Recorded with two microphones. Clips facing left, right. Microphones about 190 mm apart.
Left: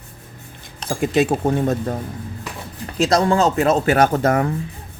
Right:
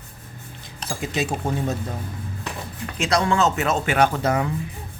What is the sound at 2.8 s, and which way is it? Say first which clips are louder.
Speech: left 5 dB; 35° left (ahead or behind).